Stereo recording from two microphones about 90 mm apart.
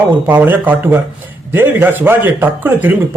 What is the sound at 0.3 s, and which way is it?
Speech, 20° right (ahead or behind).